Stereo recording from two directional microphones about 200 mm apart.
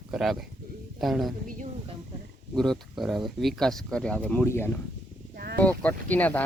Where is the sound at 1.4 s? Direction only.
40° right (ahead or behind).